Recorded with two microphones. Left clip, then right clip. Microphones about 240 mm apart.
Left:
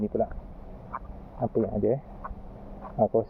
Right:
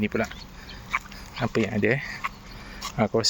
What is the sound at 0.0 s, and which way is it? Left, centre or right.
Speech, right.